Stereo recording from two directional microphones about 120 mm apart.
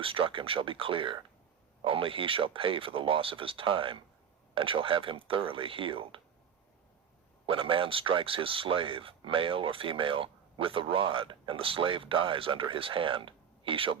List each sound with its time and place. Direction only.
0.0 s speech: 50° right (ahead or behind)
7.4 s speech: 50° right (ahead or behind)